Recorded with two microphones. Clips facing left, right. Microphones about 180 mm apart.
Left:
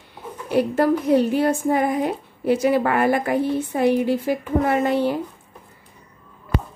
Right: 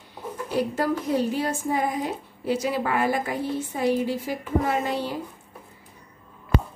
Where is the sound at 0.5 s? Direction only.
60° left (ahead or behind).